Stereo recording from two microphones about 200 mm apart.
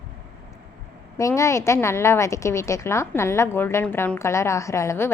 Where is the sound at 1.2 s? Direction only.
15° left (ahead or behind).